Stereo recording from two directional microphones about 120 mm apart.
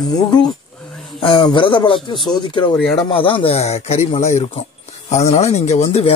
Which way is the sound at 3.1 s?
50° left (ahead or behind).